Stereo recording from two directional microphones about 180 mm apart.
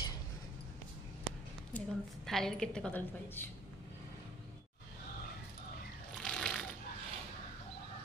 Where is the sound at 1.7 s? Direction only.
Centre (ahead or behind).